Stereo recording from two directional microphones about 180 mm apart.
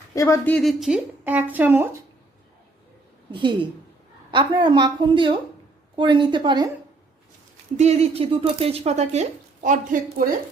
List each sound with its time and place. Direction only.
0.1 s speech: 15° left (ahead or behind); by 2.0 s 10° right (ahead or behind)
4.3 s a woman's voice: 25° right (ahead or behind)
7.8 s speech: 35° right (ahead or behind)
9.6 s a woman's voice: 50° right (ahead or behind)